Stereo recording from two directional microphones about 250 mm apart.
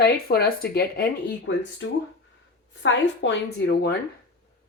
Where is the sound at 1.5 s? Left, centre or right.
Left.